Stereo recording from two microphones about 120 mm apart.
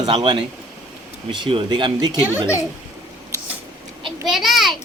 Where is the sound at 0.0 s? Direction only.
40° right (ahead or behind).